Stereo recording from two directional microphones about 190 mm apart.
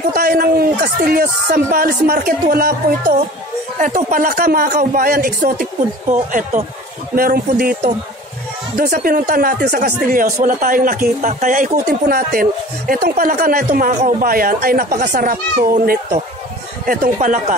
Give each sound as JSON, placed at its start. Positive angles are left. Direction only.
{"t": 0.1, "sound": "speech", "side_deg": -50}